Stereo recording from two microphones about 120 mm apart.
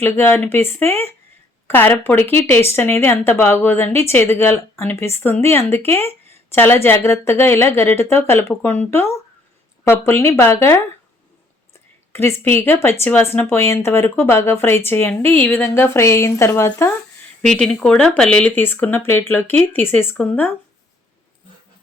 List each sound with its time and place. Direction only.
0.0 s speech: 20° left (ahead or behind)
12.1 s speech: 20° left (ahead or behind)
17.4 s speech: 5° left (ahead or behind)